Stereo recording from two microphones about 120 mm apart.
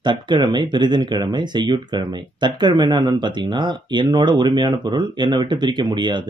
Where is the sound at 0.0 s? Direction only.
40° right (ahead or behind).